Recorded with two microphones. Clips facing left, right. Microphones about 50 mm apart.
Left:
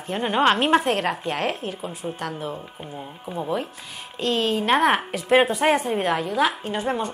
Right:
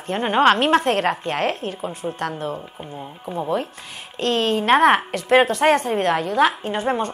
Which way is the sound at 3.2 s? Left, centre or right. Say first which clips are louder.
Right 3 dB; centre.